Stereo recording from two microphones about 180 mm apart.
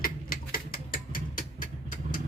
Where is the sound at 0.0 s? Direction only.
55° left (ahead or behind).